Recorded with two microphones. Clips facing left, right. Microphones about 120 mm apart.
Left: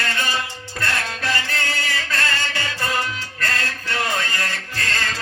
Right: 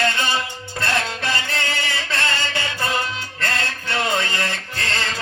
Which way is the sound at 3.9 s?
25° right (ahead or behind).